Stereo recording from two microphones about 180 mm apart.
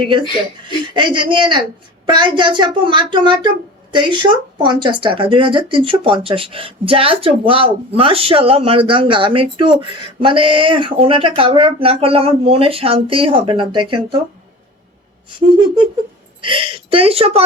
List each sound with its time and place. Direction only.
0.0 s speech: 30° right (ahead or behind)
16.4 s speech: 30° right (ahead or behind)